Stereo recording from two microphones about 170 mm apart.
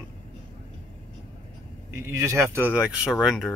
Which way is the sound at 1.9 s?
15° right (ahead or behind).